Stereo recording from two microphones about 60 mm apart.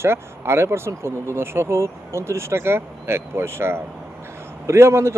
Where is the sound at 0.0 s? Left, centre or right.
Right.